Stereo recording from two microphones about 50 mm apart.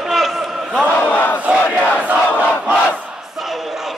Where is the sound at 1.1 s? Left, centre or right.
Left.